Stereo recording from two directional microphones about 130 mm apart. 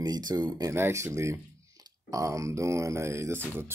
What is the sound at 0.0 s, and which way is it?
Speech, 30° right (ahead or behind).